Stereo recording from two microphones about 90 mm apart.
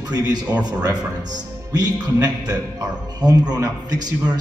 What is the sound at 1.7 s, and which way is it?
A man's voice, 45° right (ahead or behind).